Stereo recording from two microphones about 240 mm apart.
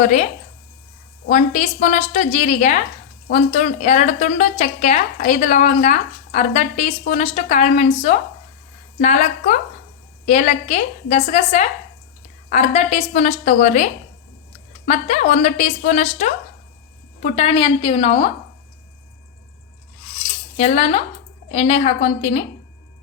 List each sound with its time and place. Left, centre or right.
0.0 s a woman's voice: left
1.3 s a woman's voice: left
20.6 s a woman's voice: left